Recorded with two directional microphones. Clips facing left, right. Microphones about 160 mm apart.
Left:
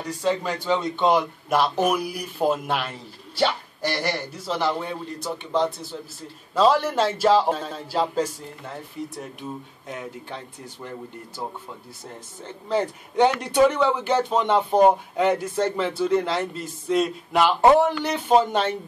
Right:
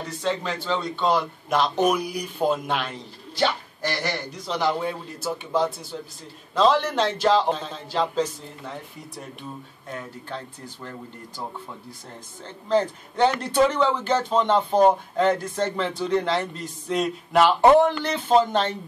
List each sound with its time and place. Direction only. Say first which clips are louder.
0.0 s a man's voice: left 2 dB; 10° left (ahead or behind)
1.5 s a man's voice: even; 5° left (ahead or behind)
9.4 s a man's voice: left 3 dB; 15° left (ahead or behind)
12.6 s a man's voice: right 2 dB; 10° left (ahead or behind)